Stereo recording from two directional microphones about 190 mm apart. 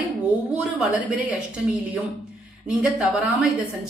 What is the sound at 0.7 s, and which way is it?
Speech, centre (ahead or behind).